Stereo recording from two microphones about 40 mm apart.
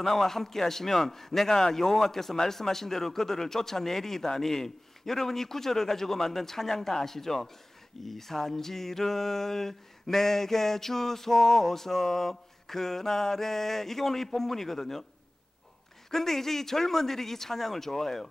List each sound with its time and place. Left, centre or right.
0.0 s a man's voice: centre
16.1 s a man's voice: centre